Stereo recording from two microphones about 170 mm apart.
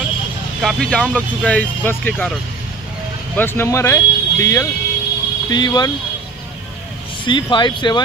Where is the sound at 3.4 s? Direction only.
15° left (ahead or behind).